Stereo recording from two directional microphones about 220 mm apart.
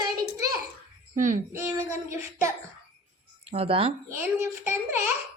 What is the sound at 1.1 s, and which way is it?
Speech, 35° right (ahead or behind).